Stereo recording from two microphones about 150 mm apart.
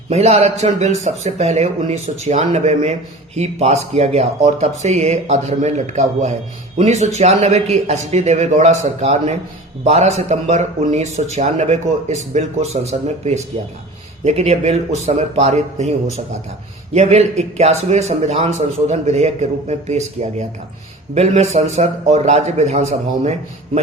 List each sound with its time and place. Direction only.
0.1 s speech: 45° right (ahead or behind)
21.2 s speech: 45° right (ahead or behind)